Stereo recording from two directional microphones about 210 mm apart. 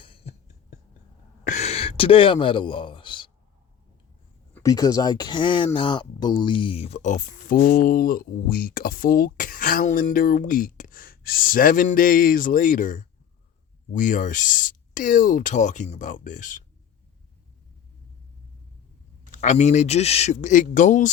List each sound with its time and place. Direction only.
0.0 s cough: 25° left (ahead or behind)
1.5 s a sound: 30° left (ahead or behind)
4.5 s speech: 15° left (ahead or behind); by 16.6 s 40° left (ahead or behind)
19.3 s speech: 35° left (ahead or behind)